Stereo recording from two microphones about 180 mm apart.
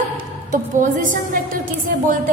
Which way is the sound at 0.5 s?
45° right (ahead or behind).